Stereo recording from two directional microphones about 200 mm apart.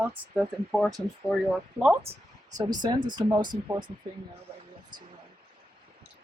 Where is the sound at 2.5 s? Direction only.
20° right (ahead or behind).